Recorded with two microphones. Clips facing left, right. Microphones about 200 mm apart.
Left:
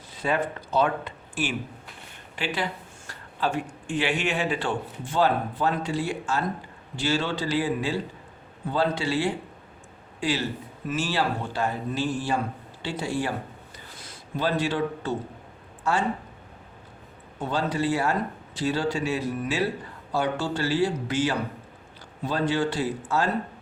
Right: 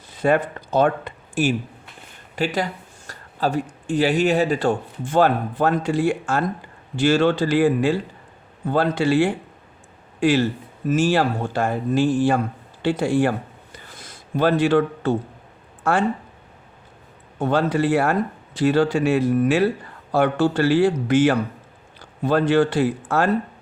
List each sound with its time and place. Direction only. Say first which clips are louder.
0.2 s speech: right 7 dB; 50° right (ahead or behind)
14.3 s speech: right 8 dB; 55° right (ahead or behind)
17.4 s speech: right 7 dB; 55° right (ahead or behind)